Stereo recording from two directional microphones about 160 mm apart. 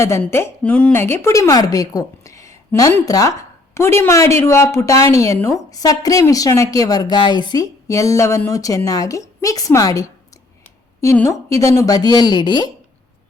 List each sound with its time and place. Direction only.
0.2 s a woman's voice: 10° left (ahead or behind); by 12.7 s 25° left (ahead or behind)